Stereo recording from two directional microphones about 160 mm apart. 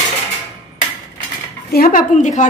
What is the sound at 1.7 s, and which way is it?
Dishes, 65° left (ahead or behind).